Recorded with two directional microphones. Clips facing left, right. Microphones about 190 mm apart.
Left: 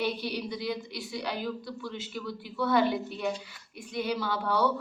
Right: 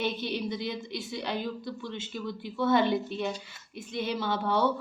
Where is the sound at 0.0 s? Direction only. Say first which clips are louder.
Even; 20° right (ahead or behind).